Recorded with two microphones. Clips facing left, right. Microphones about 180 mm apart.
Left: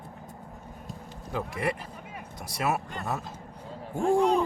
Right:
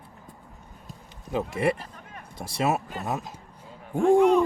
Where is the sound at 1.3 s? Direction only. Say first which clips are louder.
Right 5 dB; 20° right (ahead or behind).